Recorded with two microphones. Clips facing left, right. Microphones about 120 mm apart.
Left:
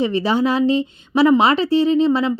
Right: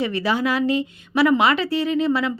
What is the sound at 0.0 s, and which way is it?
A woman's voice, 25° left (ahead or behind).